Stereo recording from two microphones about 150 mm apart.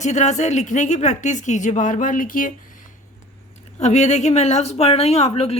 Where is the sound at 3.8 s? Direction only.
50° left (ahead or behind).